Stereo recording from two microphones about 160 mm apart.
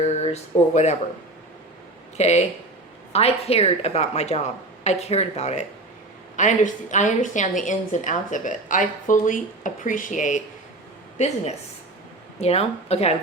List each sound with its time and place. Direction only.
0.0 s speech: 45° left (ahead or behind)
2.1 s a woman's voice: 45° left (ahead or behind)
12.4 s a woman's voice: 40° left (ahead or behind)